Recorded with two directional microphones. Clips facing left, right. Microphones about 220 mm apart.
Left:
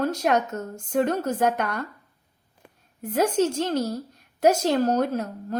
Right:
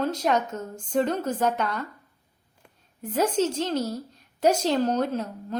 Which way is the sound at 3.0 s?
10° left (ahead or behind).